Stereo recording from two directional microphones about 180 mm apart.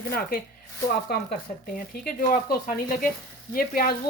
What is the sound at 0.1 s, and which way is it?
Speech, 55° left (ahead or behind).